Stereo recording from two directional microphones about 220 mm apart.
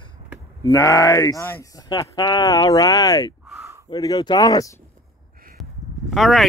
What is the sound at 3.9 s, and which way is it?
Speech, 20° left (ahead or behind).